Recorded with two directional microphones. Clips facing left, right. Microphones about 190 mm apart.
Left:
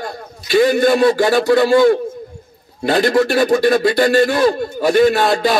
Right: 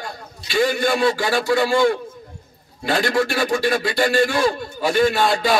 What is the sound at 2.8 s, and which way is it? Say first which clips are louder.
A man's voice: left 6 dB; 40° left (ahead or behind).